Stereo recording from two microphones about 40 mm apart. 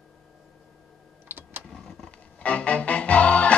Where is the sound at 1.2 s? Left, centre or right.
Right.